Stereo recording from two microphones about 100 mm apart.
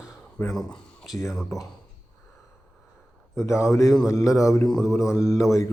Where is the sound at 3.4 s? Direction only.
30° left (ahead or behind).